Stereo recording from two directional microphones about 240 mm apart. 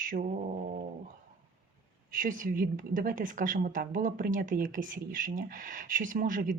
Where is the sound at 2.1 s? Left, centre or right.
Right.